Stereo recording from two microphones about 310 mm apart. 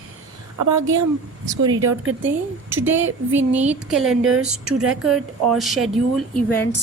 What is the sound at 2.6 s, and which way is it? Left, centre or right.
A woman's voice, centre.